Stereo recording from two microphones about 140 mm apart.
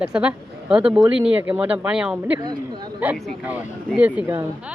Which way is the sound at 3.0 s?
10° right (ahead or behind).